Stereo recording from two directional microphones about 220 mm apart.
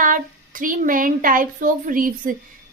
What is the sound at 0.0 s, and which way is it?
A woman's voice, 40° right (ahead or behind).